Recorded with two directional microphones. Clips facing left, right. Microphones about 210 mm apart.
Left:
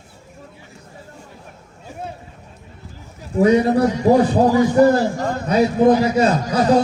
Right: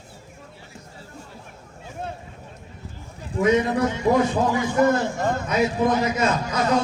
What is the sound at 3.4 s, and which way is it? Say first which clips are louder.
A man's voice: left 5 dB; 35° left (ahead or behind).